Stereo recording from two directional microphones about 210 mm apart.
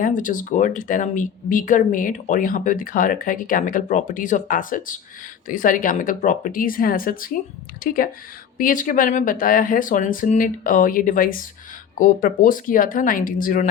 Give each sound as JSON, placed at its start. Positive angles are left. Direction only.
{"t": 0.0, "sound": "speech", "side_deg": 40}